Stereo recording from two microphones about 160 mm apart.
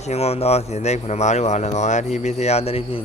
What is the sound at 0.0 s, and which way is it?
Speech, 40° left (ahead or behind).